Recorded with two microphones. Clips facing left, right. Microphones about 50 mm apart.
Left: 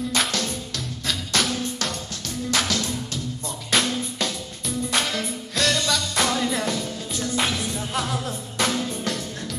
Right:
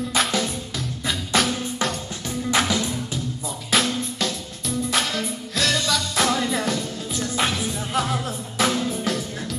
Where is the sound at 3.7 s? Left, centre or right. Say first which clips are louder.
Right 1 dB; centre.